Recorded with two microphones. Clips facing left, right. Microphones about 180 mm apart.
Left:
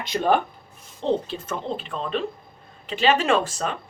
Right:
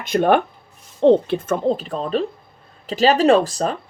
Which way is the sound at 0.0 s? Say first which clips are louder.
Right 5 dB; 55° right (ahead or behind).